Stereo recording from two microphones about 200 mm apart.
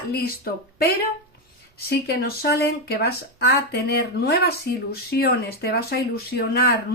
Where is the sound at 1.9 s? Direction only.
50° left (ahead or behind).